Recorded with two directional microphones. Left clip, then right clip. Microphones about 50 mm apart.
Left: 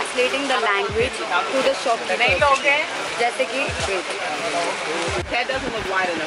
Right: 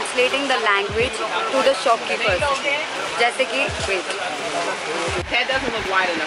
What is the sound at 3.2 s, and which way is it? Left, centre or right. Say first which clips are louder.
Speech: right 3 dB; centre.